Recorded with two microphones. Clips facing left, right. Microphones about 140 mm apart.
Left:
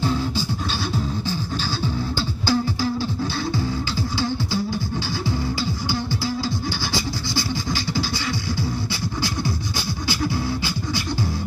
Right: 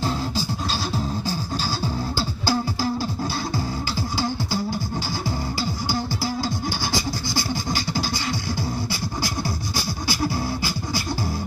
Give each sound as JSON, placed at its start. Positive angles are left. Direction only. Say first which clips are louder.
{"t": 2.1, "sound": "beatboxing", "louder": "left 2 dB", "side_deg": -40}
{"t": 5.6, "sound": "beatboxing", "louder": "even", "side_deg": -40}
{"t": 7.7, "sound": "beatboxing", "louder": "left 1 dB", "side_deg": -45}
{"t": 10.0, "sound": "beatboxing", "louder": "left 1 dB", "side_deg": -40}